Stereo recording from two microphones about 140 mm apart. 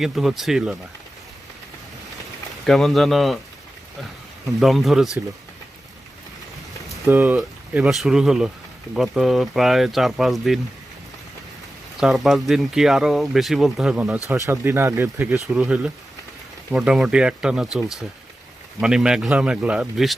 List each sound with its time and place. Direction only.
0.0 s speech: centre (ahead or behind)
2.6 s speech: centre (ahead or behind)
4.4 s speech: centre (ahead or behind)
7.0 s speech: 15° right (ahead or behind)
7.3 s speech: centre (ahead or behind)
11.9 s speech: centre (ahead or behind)
14.3 s speech: 20° right (ahead or behind)
15.4 s speech: 5° right (ahead or behind)